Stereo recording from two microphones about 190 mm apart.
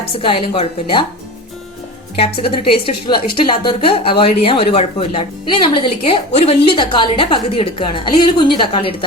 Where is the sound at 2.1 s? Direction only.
30° left (ahead or behind).